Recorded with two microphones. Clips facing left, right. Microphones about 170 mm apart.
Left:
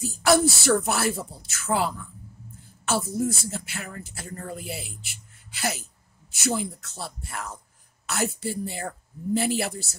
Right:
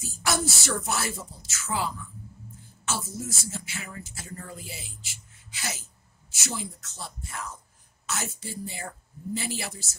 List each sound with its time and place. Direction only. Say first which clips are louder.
0.0 s speech: left 9 dB; 60° left (ahead or behind)